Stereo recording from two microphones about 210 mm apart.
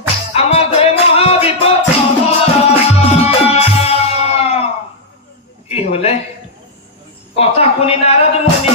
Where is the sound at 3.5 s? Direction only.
30° left (ahead or behind).